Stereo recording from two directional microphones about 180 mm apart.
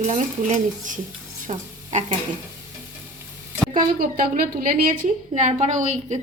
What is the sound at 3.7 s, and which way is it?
A woman's voice, 50° right (ahead or behind).